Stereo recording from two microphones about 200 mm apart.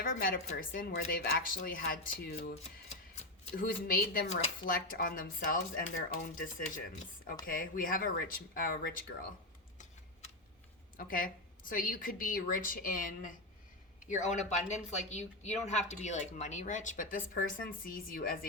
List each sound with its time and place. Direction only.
0.0 s a woman's voice: 45° left (ahead or behind)
10.9 s a woman's voice: 45° left (ahead or behind)